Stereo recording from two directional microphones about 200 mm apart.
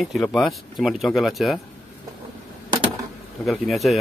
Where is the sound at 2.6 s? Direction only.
25° right (ahead or behind).